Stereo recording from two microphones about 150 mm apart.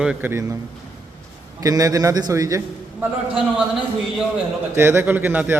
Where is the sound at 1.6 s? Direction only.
25° right (ahead or behind).